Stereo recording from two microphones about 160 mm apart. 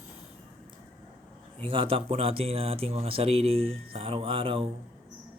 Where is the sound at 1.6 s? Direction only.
35° right (ahead or behind).